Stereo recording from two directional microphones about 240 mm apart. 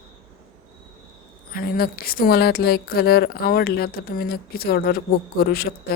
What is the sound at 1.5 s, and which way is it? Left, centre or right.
A woman's voice, left.